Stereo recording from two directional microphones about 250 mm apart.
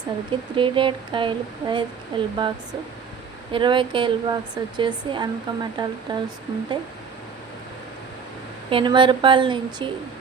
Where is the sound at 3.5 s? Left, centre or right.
Centre.